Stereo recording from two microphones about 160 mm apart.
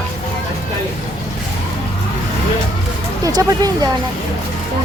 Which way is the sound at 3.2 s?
25° right (ahead or behind).